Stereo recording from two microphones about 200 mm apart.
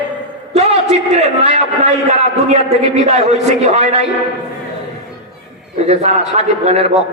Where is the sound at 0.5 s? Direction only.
35° right (ahead or behind).